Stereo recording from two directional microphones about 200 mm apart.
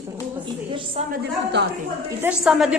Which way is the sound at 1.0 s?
30° right (ahead or behind).